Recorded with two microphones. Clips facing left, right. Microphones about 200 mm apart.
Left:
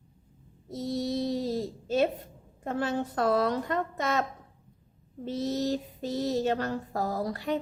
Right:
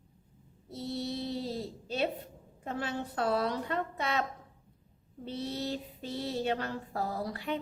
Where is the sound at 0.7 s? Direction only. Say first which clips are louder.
Left 5 dB; 45° left (ahead or behind).